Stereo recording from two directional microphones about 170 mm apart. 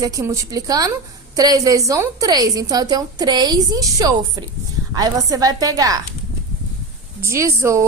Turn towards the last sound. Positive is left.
turn(degrees=-15)  # may be behind; listen again after turning